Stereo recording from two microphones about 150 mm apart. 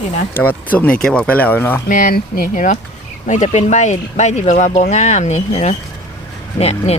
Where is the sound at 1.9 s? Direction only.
65° left (ahead or behind).